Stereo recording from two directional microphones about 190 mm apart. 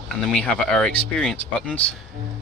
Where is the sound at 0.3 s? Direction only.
5° left (ahead or behind).